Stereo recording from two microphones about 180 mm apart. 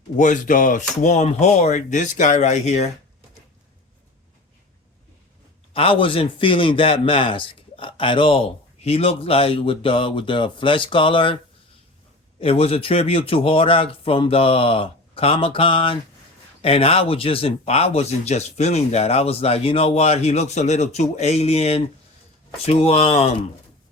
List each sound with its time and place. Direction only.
0.2 s speech: 45° left (ahead or behind)
5.7 s a man's voice: 30° left (ahead or behind)
12.4 s speech: 30° left (ahead or behind)